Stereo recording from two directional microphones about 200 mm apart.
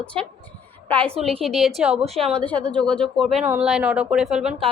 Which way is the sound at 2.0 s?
30° right (ahead or behind).